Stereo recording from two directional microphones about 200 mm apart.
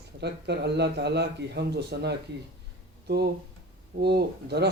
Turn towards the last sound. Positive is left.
turn(degrees=-55)  # may be behind; listen again after turning